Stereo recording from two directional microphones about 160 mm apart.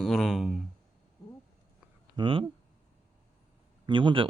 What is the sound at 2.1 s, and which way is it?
Speech, 30° right (ahead or behind).